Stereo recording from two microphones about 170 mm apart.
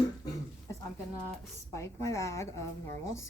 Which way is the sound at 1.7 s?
15° left (ahead or behind).